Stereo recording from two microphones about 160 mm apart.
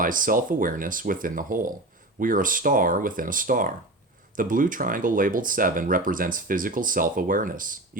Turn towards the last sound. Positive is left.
turn(degrees=-60)  # may be behind; listen again after turning